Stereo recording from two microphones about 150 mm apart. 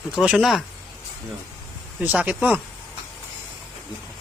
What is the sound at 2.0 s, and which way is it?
Speech, 10° right (ahead or behind).